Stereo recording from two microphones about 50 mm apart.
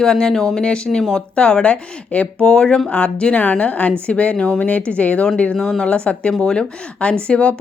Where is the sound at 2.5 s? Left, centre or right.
Centre.